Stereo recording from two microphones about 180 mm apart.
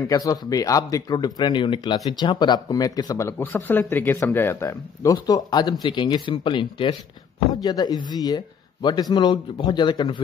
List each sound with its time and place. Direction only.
0.1 s speech: 20° left (ahead or behind)